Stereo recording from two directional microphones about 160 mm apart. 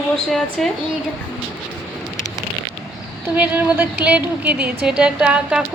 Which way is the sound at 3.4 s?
10° right (ahead or behind).